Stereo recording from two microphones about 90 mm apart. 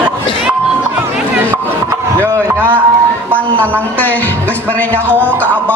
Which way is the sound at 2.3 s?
35° right (ahead or behind).